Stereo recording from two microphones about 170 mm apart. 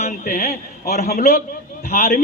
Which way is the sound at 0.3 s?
60° left (ahead or behind).